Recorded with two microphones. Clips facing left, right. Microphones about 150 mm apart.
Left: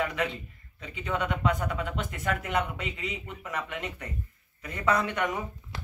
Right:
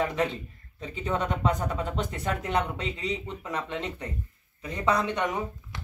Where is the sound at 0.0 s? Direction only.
35° right (ahead or behind).